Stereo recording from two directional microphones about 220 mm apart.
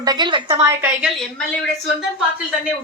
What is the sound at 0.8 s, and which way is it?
Speech, centre (ahead or behind).